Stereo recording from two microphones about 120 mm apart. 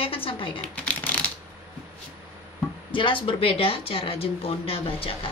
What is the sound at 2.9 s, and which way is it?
Speech, 45° left (ahead or behind).